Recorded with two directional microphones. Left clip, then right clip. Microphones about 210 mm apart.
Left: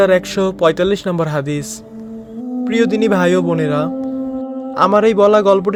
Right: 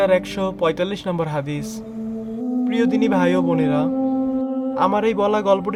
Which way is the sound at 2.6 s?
25° left (ahead or behind).